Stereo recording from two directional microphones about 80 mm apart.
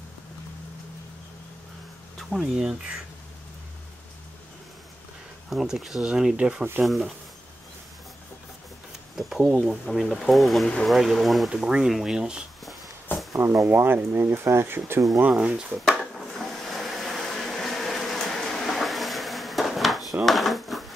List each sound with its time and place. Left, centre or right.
2.1 s speech: centre
5.5 s speech: centre
9.1 s speech: centre
13.7 s speech: right
15.3 s speech: centre
16.1 s a sound: centre
20.2 s drawer open or close: centre